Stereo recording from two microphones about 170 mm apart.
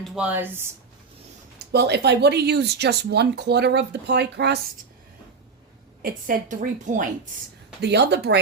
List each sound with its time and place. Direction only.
0.0 s speech: 10° right (ahead or behind)
1.5 s speech: 75° right (ahead or behind)
6.0 s a woman's voice: 55° right (ahead or behind)
7.8 s speech: 85° right